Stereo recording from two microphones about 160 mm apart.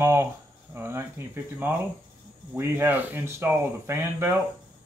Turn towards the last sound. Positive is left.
turn(degrees=-15)  # may be behind; listen again after turning